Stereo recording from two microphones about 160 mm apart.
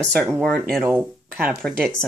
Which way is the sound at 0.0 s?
20° right (ahead or behind).